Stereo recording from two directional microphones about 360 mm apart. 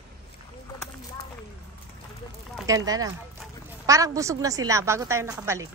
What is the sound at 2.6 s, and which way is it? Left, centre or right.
A woman's voice, centre.